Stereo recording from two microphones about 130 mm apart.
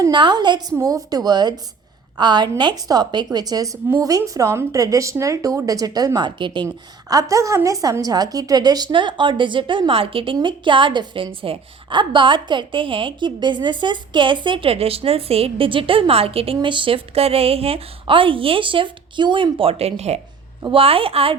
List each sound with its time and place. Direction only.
0.0 s a woman's voice: 35° right (ahead or behind)
7.1 s a woman's voice: 25° right (ahead or behind); by 21.3 s 45° right (ahead or behind)